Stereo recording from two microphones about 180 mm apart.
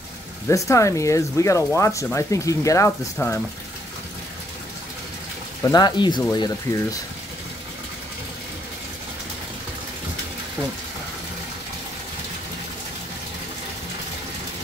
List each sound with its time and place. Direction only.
0.5 s speech: 15° left (ahead or behind)
5.6 s speech: 20° left (ahead or behind)